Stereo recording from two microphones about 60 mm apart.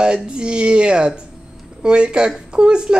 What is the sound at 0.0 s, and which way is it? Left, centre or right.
Speech, centre.